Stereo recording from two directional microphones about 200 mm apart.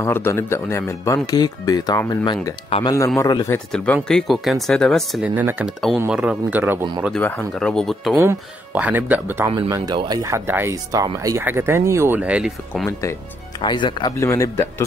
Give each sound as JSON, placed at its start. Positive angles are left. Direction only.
{"t": 0.0, "sound": "speech", "side_deg": 15}
{"t": 3.5, "sound": "speech", "side_deg": 5}
{"t": 7.2, "sound": "speech", "side_deg": 10}
{"t": 9.5, "sound": "speech", "side_deg": -20}
{"t": 13.6, "sound": "speech", "side_deg": 25}